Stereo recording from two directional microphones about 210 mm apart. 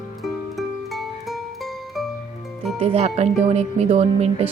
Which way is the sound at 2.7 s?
30° right (ahead or behind).